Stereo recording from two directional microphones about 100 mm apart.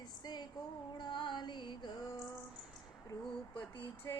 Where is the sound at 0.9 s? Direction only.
50° left (ahead or behind).